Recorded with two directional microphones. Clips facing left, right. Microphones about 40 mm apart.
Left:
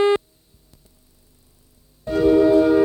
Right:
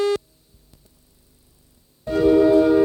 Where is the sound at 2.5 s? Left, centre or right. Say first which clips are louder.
Even; left.